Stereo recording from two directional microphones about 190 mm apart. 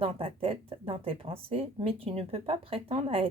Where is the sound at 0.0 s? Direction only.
30° right (ahead or behind).